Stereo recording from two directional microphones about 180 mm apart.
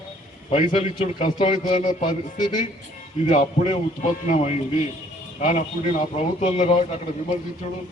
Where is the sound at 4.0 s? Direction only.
45° left (ahead or behind).